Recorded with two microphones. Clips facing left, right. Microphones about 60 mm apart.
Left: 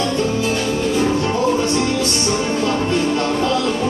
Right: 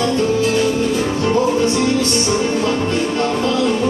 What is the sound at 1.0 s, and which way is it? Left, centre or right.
Music, centre.